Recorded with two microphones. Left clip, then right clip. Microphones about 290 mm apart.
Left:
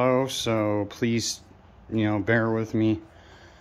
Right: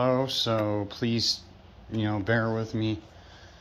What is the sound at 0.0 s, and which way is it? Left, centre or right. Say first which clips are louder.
Speech: left 2 dB; centre.